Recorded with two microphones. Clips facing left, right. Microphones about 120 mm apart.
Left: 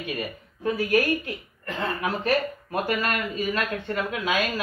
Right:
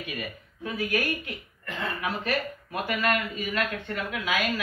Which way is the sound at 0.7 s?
40° left (ahead or behind).